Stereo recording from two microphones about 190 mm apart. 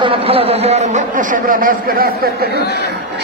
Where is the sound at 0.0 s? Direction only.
30° right (ahead or behind).